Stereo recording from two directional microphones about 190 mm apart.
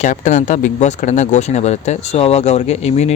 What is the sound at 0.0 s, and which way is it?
Speech, 40° left (ahead or behind).